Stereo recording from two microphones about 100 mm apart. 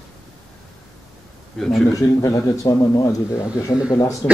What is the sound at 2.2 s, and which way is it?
A man's voice, 35° left (ahead or behind).